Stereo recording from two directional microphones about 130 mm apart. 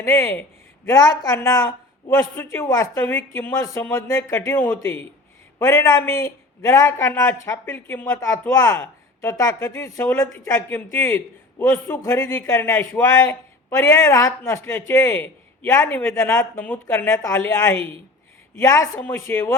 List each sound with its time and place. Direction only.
0.0 s speech: 20° left (ahead or behind)